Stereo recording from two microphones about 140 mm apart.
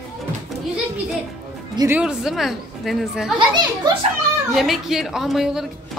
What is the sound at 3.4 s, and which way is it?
Speech, 35° right (ahead or behind).